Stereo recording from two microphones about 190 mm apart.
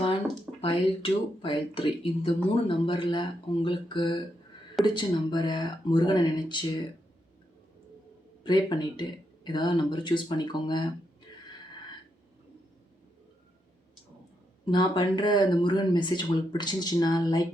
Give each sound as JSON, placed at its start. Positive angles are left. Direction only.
{"t": 0.6, "sound": "speech", "side_deg": 30}
{"t": 8.4, "sound": "speech", "side_deg": 25}
{"t": 14.6, "sound": "speech", "side_deg": 25}